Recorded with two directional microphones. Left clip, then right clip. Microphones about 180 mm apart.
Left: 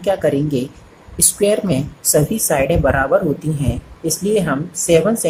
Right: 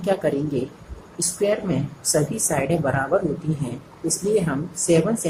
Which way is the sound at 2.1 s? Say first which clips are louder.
Left 7 dB; 30° left (ahead or behind).